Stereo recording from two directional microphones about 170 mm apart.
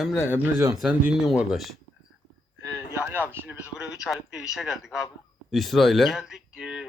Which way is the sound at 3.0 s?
10° right (ahead or behind).